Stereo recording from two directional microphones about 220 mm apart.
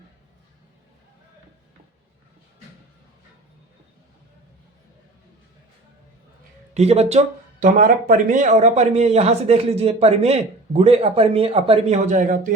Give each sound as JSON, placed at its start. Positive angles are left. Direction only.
{"t": 6.7, "sound": "a man's voice", "side_deg": -30}